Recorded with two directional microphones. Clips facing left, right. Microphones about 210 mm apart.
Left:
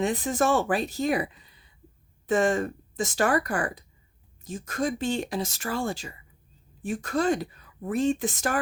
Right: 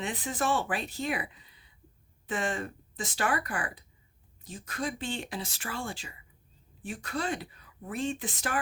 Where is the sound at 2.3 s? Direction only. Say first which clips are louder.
Left 9 dB; 45° left (ahead or behind).